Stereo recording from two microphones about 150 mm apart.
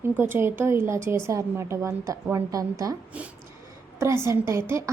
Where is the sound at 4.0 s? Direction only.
15° right (ahead or behind).